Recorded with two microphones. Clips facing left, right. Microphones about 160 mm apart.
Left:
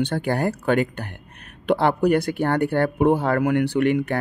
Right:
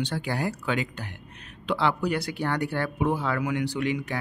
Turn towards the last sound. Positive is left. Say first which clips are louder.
# left 8 dB
turn(degrees=55)  # may be behind; listen again after turning